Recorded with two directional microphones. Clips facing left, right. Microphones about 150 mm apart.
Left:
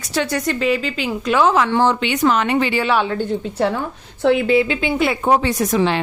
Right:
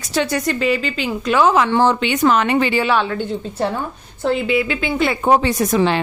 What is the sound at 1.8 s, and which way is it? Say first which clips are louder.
Speech: right 1 dB; 40° right (ahead or behind).